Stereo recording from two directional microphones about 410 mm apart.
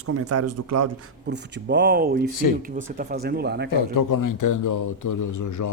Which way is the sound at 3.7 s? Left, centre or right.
Left.